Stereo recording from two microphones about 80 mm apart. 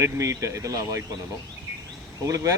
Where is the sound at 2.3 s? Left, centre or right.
Right.